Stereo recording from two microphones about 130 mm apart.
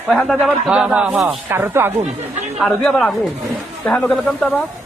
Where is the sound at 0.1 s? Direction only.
Centre (ahead or behind).